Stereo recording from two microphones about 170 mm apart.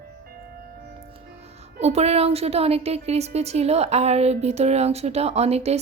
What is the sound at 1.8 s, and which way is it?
A woman's voice, 40° right (ahead or behind).